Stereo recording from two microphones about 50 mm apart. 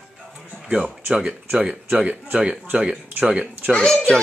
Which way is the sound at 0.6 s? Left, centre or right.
Centre.